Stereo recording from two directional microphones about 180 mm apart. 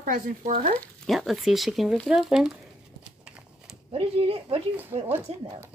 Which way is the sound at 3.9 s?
35° right (ahead or behind).